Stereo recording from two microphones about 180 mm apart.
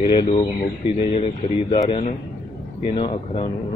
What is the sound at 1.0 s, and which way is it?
Speech, 35° left (ahead or behind).